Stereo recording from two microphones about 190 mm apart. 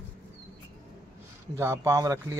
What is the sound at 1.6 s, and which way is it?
Speech, 15° right (ahead or behind).